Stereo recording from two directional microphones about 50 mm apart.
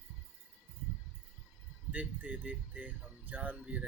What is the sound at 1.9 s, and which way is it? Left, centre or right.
Speech, right.